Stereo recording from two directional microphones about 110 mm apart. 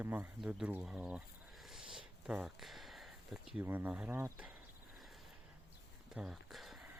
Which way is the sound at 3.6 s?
15° right (ahead or behind).